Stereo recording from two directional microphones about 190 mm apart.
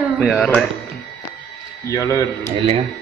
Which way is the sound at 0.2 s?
5° left (ahead or behind).